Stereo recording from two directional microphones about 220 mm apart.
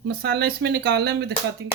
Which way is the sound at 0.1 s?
50° right (ahead or behind).